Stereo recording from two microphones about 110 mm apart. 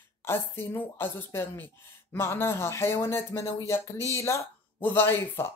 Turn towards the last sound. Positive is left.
turn(degrees=20)  # may be behind; listen again after turning